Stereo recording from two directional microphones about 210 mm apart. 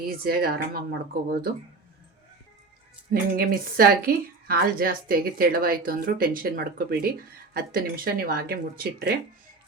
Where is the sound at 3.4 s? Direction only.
45° right (ahead or behind).